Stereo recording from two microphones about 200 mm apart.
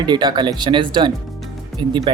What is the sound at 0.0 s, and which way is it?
Speech, 20° right (ahead or behind).